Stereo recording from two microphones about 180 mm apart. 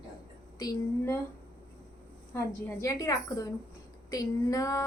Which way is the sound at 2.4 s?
15° left (ahead or behind).